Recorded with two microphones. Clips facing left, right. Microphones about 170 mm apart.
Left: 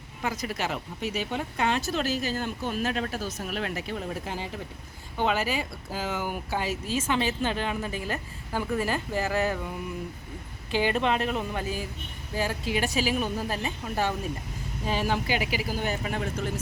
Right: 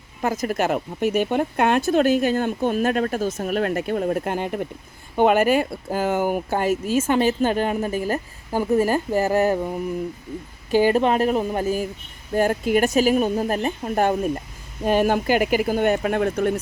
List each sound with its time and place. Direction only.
0.2 s speech: 45° right (ahead or behind)